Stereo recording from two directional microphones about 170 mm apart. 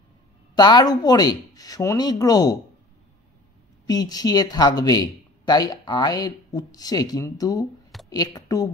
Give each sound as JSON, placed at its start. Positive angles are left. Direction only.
{"t": 0.6, "sound": "speech", "side_deg": 25}
{"t": 3.8, "sound": "speech", "side_deg": 25}